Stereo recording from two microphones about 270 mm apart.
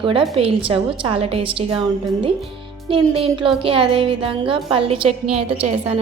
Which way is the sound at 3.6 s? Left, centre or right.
Centre.